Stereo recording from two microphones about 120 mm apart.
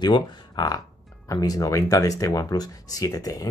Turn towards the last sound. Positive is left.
turn(degrees=30)  # may be behind; listen again after turning